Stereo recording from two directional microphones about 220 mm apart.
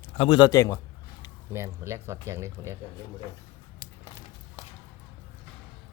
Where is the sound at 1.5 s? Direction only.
10° right (ahead or behind).